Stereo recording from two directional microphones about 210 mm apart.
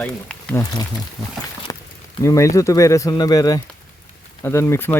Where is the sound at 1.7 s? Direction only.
20° left (ahead or behind).